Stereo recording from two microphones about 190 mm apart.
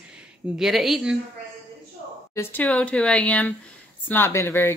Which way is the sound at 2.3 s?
10° left (ahead or behind).